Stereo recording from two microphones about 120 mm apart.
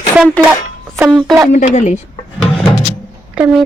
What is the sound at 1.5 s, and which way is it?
Speech, 90° left.